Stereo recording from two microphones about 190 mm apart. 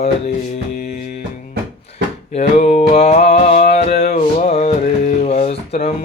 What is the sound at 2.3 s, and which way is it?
Music, 35° left (ahead or behind).